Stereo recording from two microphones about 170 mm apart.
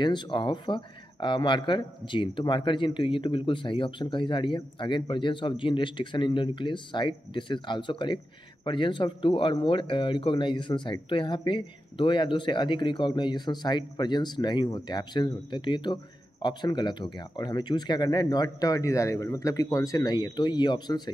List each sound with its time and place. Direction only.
0.0 s speech: 25° left (ahead or behind)